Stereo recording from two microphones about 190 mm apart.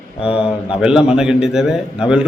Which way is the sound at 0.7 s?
5° right (ahead or behind).